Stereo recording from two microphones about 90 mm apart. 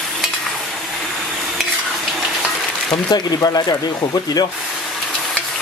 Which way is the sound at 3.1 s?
45° left (ahead or behind).